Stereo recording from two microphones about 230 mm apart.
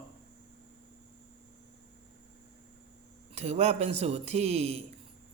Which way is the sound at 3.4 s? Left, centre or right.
Right.